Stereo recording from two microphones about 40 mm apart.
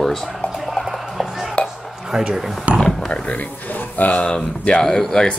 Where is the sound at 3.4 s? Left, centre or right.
Left.